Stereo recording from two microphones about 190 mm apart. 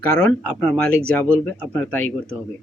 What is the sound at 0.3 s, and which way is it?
Speech, 5° left (ahead or behind).